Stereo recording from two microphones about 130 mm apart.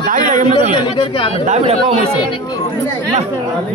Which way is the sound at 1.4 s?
65° right (ahead or behind).